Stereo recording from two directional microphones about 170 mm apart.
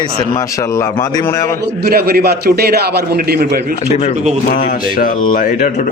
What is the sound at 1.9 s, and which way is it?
Speech, 65° right (ahead or behind).